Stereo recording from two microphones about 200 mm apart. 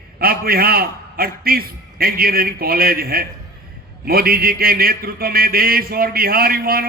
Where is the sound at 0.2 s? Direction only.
50° right (ahead or behind).